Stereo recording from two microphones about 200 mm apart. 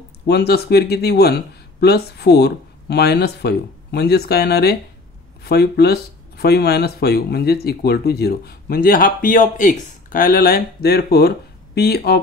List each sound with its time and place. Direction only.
0.3 s speech: 55° left (ahead or behind)